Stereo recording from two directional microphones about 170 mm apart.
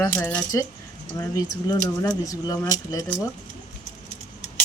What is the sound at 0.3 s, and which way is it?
Speech, 10° left (ahead or behind).